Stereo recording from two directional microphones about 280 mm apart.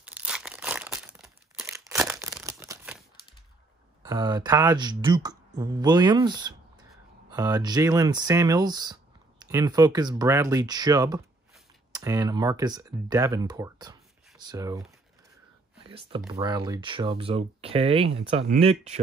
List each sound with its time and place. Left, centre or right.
0.0 s crumpling: centre
4.0 s speech: centre
16.3 s speech: centre